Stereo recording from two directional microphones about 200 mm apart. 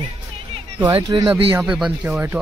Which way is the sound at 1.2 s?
5° right (ahead or behind).